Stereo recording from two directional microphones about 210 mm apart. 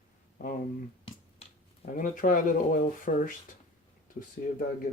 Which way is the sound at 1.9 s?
40° left (ahead or behind).